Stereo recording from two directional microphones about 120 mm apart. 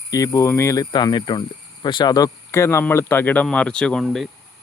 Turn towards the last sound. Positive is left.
turn(degrees=0)  # may be behind; listen again after turning